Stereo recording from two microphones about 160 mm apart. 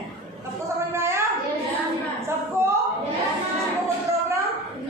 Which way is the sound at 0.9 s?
15° right (ahead or behind).